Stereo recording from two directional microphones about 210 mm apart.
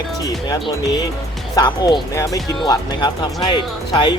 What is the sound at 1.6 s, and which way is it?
Speech, 20° left (ahead or behind).